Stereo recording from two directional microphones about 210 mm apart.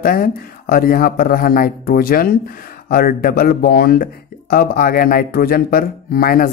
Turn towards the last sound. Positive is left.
turn(degrees=45)  # may be behind; listen again after turning